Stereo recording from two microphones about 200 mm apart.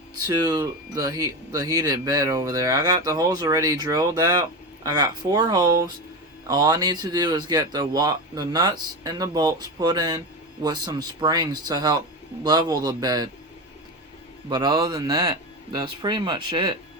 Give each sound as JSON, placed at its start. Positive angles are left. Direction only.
{"t": 0.3, "sound": "speech", "side_deg": -20}
{"t": 14.5, "sound": "speech", "side_deg": -20}